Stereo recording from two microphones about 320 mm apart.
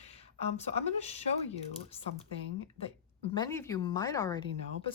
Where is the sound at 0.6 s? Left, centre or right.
Centre.